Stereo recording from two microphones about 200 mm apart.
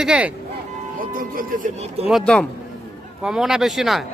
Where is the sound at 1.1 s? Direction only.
45° right (ahead or behind).